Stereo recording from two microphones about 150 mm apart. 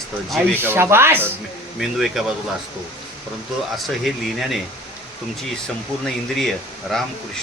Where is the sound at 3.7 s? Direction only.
Centre (ahead or behind).